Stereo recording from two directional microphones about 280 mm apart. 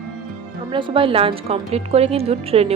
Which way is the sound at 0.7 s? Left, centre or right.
Centre.